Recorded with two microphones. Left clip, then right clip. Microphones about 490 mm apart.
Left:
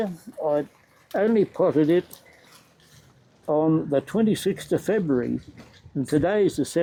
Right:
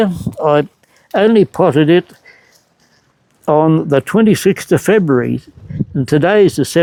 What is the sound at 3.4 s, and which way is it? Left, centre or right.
Speech, right.